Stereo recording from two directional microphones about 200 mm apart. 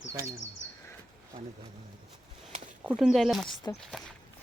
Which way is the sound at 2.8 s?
5° right (ahead or behind).